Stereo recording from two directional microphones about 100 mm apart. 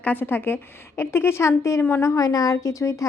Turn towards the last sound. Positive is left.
turn(degrees=30)  # may be behind; listen again after turning